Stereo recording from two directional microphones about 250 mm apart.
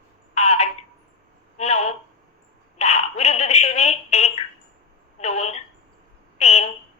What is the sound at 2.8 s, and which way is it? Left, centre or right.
Telephone, left.